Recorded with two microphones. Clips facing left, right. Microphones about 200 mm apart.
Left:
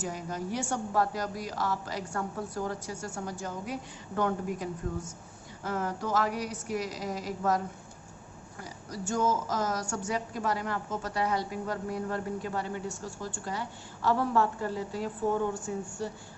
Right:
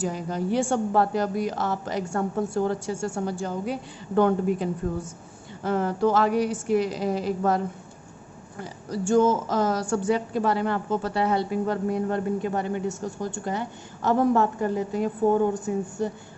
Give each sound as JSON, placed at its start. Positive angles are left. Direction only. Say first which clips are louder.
{"t": 0.0, "sound": "a woman's voice", "louder": "right 7 dB", "side_deg": -30}
{"t": 8.6, "sound": "a woman's voice", "louder": "right 9 dB", "side_deg": -30}